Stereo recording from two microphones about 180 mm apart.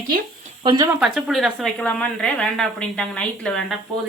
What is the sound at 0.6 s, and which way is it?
Speech, 25° right (ahead or behind).